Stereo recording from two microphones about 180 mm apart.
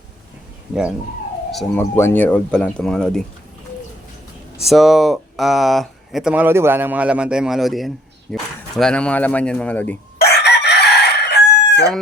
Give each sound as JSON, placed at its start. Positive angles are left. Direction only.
{"t": 0.7, "sound": "speech", "side_deg": -5}
{"t": 2.0, "sound": "speech", "side_deg": 10}
{"t": 4.6, "sound": "speech", "side_deg": 0}
{"t": 10.2, "sound": "chicken", "side_deg": 65}